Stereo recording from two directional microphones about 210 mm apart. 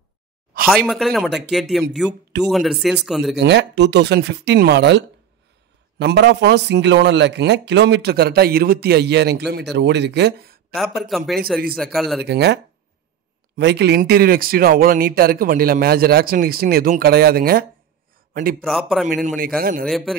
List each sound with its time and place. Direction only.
0.7 s speech: centre (ahead or behind)
3.3 s a man's voice: 55° right (ahead or behind)
11.0 s speech: centre (ahead or behind)
12.3 s a man's voice: 50° right (ahead or behind)
13.6 s a man's voice: 55° right (ahead or behind)
18.6 s speech: centre (ahead or behind)
19.2 s a man's voice: 40° right (ahead or behind)
19.9 s speech: centre (ahead or behind)